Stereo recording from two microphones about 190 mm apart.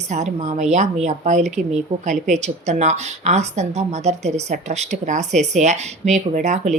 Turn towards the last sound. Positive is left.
turn(degrees=-40)  # may be behind; listen again after turning